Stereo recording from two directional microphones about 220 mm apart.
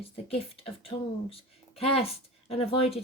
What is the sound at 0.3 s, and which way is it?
A woman's voice, 25° left (ahead or behind).